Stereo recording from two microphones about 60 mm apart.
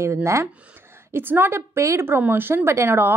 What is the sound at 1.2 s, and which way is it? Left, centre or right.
Speech, right.